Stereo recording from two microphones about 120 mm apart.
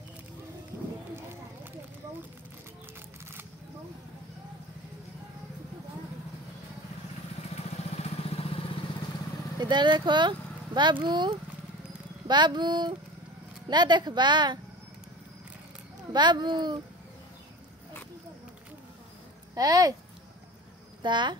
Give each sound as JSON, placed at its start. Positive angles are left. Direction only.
{"t": 1.1, "sound": "a sound", "side_deg": -20}
{"t": 7.5, "sound": "vehicle", "side_deg": 60}
{"t": 9.6, "sound": "speech", "side_deg": -40}
{"t": 16.1, "sound": "speech", "side_deg": -40}
{"t": 19.5, "sound": "speech", "side_deg": -30}
{"t": 21.0, "sound": "speech", "side_deg": -40}